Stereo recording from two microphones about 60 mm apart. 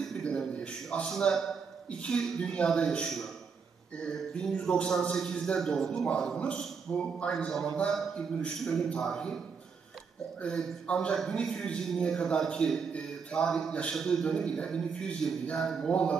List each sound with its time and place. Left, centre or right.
0.1 s a sound: centre
1.9 s a man's voice: centre
6.6 s a man's voice: centre
10.4 s a man's voice: centre